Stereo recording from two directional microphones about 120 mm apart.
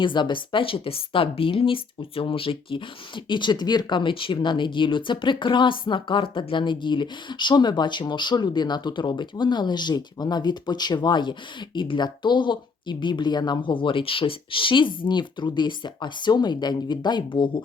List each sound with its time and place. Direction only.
0.0 s speech: 45° left (ahead or behind)